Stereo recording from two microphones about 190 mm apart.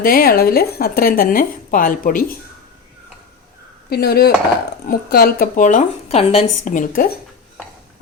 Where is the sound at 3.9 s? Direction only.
55° left (ahead or behind).